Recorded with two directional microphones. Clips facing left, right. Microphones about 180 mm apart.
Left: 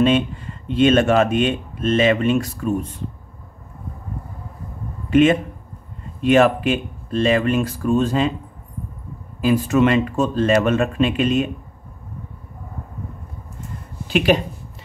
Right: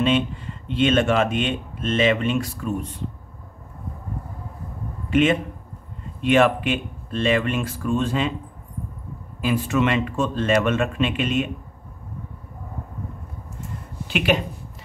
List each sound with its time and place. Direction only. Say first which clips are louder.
0.7 s speech: left 4 dB; 45° left (ahead or behind)
5.1 s speech: left 4 dB; 45° left (ahead or behind)
9.4 s speech: left 5 dB; 40° left (ahead or behind)
14.0 s speech: left 4 dB; 35° left (ahead or behind)